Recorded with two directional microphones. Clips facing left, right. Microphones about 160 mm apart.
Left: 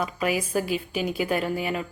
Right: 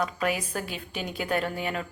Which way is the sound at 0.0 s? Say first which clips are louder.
Left 2 dB; 10° left (ahead or behind).